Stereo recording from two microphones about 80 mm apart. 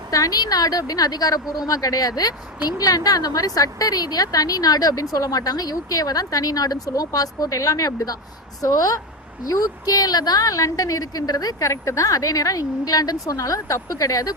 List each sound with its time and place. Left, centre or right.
0.1 s a woman's voice: left